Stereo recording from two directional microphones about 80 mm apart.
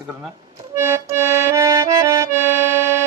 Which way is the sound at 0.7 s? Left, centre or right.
Right.